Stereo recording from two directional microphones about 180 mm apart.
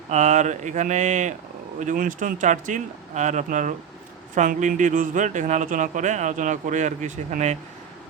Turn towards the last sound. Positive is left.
turn(degrees=-45)  # may be behind; listen again after turning